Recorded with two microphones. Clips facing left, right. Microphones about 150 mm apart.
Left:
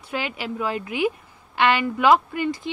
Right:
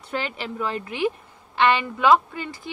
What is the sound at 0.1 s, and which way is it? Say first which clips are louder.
A woman's voice: left 1 dB; 10° left (ahead or behind).